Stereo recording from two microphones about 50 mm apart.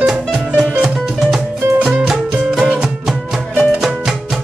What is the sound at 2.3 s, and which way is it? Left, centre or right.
Music, right.